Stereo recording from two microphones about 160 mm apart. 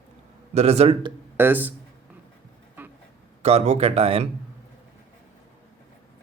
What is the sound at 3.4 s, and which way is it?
Speech, 45° right (ahead or behind).